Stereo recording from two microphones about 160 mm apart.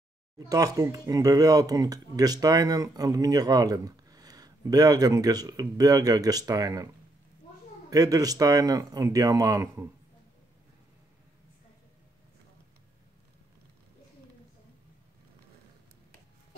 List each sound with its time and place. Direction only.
0.5 s speech: 25° right (ahead or behind)
7.9 s speech: 25° right (ahead or behind)